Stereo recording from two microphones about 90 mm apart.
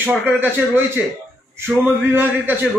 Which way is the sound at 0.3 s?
20° right (ahead or behind).